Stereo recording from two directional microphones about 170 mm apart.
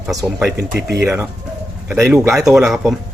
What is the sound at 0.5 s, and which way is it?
Speech, 70° right (ahead or behind).